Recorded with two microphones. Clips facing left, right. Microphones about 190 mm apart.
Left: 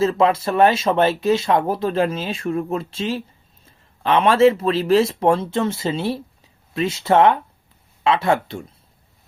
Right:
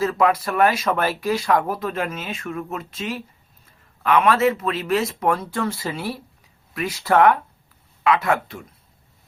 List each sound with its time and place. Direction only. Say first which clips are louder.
0.0 s speech: left 2 dB; 25° left (ahead or behind)